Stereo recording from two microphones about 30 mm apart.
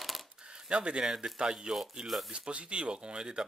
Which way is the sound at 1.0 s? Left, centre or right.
Centre.